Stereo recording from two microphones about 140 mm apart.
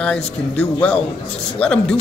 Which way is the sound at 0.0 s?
10° left (ahead or behind).